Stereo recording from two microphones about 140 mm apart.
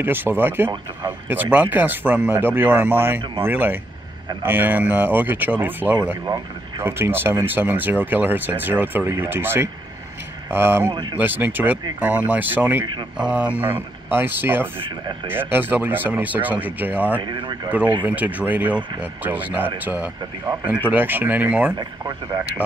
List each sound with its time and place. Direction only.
0.0 s speech: 15° right (ahead or behind)
17.2 s speech: 30° right (ahead or behind)
18.0 s speech: 10° right (ahead or behind)
20.9 s speech: 15° right (ahead or behind)
21.7 s speech: 25° right (ahead or behind)